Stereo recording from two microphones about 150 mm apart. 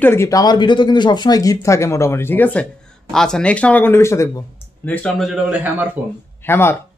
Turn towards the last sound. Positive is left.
turn(degrees=15)  # may be behind; listen again after turning